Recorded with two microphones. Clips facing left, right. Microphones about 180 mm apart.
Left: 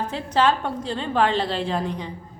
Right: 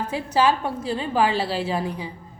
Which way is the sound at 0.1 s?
10° right (ahead or behind).